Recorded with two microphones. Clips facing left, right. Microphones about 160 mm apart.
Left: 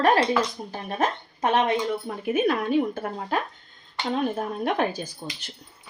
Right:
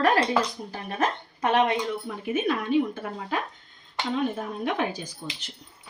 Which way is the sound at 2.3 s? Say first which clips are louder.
Left 2 dB; 50° left (ahead or behind).